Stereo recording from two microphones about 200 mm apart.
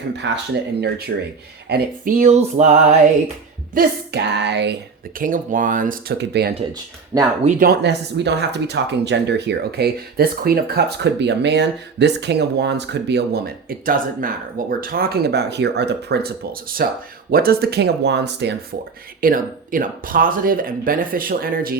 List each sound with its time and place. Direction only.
0.2 s speech: 65° right (ahead or behind)
0.8 s speech: 55° right (ahead or behind)
1.7 s a sound: 40° right (ahead or behind)
3.8 s speech: 55° right (ahead or behind)
5.2 s a sound: 40° right (ahead or behind)
6.1 s speech: 55° right (ahead or behind)
19.2 s speech: 45° right (ahead or behind)